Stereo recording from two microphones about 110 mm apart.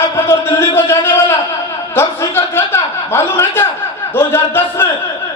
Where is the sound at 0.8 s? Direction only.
20° left (ahead or behind).